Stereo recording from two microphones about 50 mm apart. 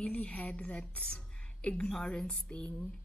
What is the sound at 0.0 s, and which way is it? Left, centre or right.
A woman's voice, left.